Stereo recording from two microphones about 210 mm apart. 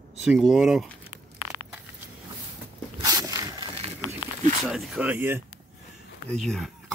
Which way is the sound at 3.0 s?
15° right (ahead or behind).